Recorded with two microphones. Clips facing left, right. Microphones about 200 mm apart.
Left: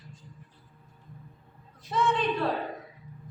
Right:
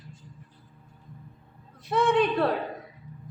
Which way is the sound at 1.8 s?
60° right (ahead or behind).